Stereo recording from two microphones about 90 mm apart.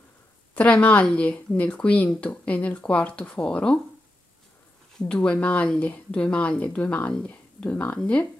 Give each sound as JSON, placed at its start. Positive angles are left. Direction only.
{"t": 0.6, "sound": "speech", "side_deg": 15}
{"t": 4.9, "sound": "speech", "side_deg": 10}